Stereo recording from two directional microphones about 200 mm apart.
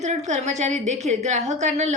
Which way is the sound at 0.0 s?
35° right (ahead or behind).